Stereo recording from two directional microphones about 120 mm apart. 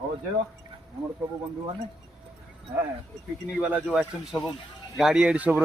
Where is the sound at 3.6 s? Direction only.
10° right (ahead or behind).